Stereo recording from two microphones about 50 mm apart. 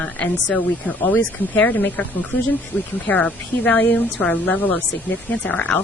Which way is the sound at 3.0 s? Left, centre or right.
Left.